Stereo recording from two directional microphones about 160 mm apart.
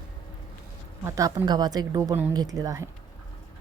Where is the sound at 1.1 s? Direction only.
20° right (ahead or behind).